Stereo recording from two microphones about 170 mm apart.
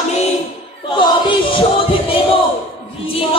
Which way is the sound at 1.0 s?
30° left (ahead or behind).